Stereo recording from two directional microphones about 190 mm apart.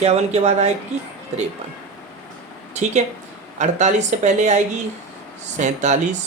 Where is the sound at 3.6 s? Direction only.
40° right (ahead or behind).